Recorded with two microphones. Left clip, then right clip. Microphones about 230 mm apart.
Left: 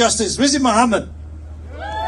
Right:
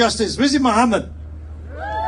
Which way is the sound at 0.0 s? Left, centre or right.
Left.